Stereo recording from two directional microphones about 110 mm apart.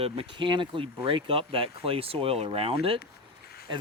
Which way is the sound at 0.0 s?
55° right (ahead or behind).